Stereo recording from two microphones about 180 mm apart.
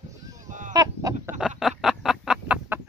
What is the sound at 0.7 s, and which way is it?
Chicken, 20° right (ahead or behind).